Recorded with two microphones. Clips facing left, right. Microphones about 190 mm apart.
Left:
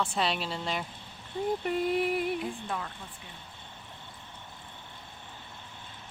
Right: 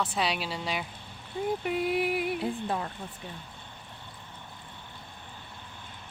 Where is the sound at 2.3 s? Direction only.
30° right (ahead or behind).